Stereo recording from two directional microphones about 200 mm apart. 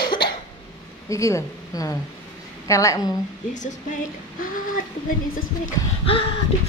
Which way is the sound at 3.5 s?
40° left (ahead or behind).